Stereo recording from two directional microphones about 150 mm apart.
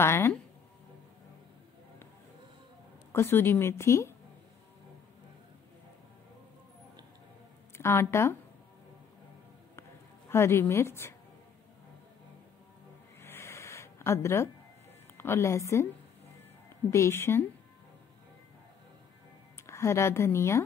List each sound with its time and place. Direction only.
0.0 s speech: 15° left (ahead or behind)
3.1 s speech: 15° left (ahead or behind)
7.7 s speech: 15° left (ahead or behind)
10.3 s speech: 15° left (ahead or behind)
13.2 s a sound: 15° left (ahead or behind)
15.1 s a woman's voice: 15° left (ahead or behind)
16.9 s speech: 15° left (ahead or behind)
19.6 s speech: 20° left (ahead or behind)